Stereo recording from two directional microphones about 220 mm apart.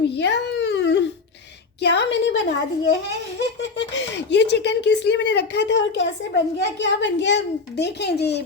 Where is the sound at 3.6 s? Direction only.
55° left (ahead or behind).